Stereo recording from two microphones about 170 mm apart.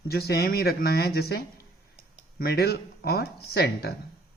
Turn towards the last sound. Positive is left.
turn(degrees=70)  # may be behind; listen again after turning